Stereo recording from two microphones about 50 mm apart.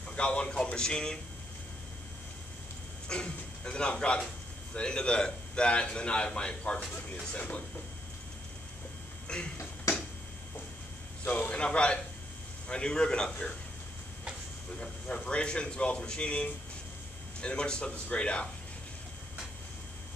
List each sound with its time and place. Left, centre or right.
0.1 s a man's voice: left
3.1 s a man's voice: left
9.3 s speech: centre
11.2 s a man's voice: left
11.5 s a man's voice: left
14.8 s a man's voice: centre